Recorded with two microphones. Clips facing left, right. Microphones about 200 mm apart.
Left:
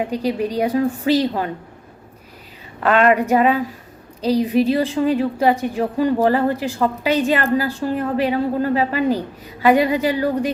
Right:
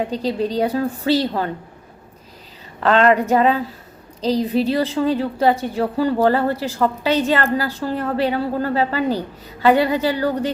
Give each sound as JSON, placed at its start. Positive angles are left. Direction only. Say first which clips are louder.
{"t": 0.1, "sound": "a woman's voice", "louder": "even", "side_deg": 10}
{"t": 2.8, "sound": "a woman's voice", "louder": "even", "side_deg": -30}
{"t": 3.1, "sound": "a woman's voice", "louder": "even", "side_deg": 10}